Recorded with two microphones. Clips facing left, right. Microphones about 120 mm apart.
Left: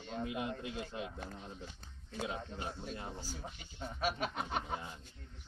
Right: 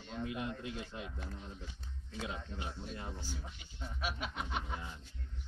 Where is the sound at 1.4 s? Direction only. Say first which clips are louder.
Left 1 dB; 20° left (ahead or behind).